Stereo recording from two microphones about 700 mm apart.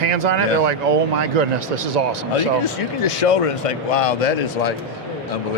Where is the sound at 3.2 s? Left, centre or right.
Left.